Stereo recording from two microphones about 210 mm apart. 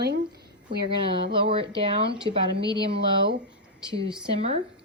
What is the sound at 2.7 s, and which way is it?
Speech, 50° right (ahead or behind).